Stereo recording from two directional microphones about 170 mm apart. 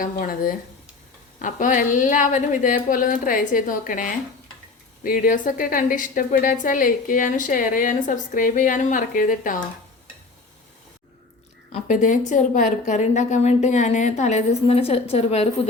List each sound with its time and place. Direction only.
0.0 s a woman's voice: 55° left (ahead or behind)
11.7 s a woman's voice: 45° left (ahead or behind)